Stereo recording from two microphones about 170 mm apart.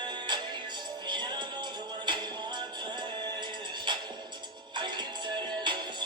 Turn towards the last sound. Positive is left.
turn(degrees=-25)  # may be behind; listen again after turning